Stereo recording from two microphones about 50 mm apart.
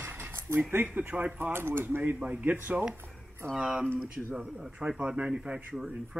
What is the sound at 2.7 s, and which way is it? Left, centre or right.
Speech, centre.